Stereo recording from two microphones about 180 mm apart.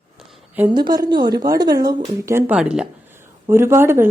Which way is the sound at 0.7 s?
25° right (ahead or behind).